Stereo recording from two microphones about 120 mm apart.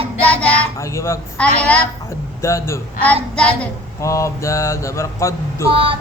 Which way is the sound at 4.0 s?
25° left (ahead or behind).